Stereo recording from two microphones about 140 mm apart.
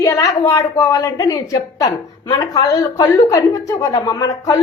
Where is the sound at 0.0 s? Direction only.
20° left (ahead or behind).